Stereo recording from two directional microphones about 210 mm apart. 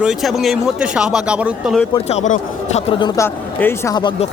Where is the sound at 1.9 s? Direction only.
30° left (ahead or behind).